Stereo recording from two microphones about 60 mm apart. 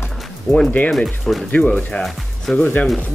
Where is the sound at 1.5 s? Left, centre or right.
Left.